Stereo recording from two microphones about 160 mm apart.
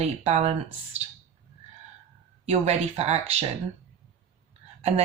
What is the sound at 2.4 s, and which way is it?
Speech, 40° right (ahead or behind).